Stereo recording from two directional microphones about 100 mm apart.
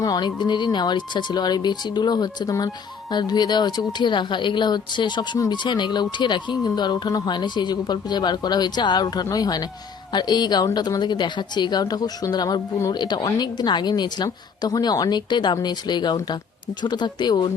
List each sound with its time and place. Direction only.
0.0 s speech: 45° left (ahead or behind)